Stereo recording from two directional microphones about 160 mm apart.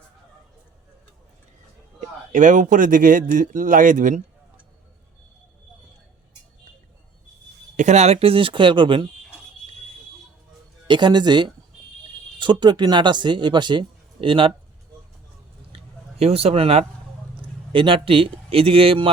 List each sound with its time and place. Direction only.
2.3 s speech: 55° right (ahead or behind)
7.8 s a man's voice: 45° right (ahead or behind)
10.8 s speech: 30° right (ahead or behind)
15.7 s a sound: 40° right (ahead or behind)
17.7 s a man's voice: 35° right (ahead or behind)